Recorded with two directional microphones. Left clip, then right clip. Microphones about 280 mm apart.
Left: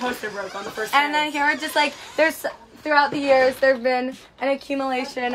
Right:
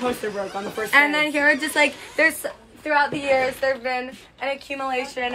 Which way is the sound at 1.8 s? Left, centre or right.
Left.